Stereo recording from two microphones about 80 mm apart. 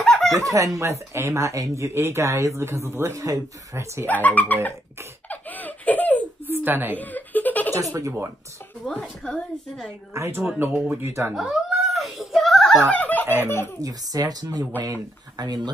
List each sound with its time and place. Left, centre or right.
0.0 s chuckle: centre
0.3 s speech: right
4.0 s speech: left
5.3 s laughter: left
6.4 s a sound: right
7.0 s chuckle: left
8.8 s a woman's voice: centre
10.1 s speech: right
11.3 s giggle: centre
12.9 s speech: left
13.7 s speech: right